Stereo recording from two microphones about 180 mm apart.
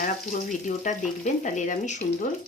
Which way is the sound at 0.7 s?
40° left (ahead or behind).